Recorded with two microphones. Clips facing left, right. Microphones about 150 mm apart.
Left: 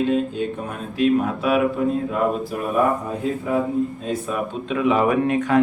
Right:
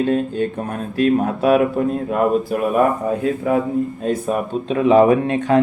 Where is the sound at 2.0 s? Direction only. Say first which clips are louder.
Right 4 dB; 60° right (ahead or behind).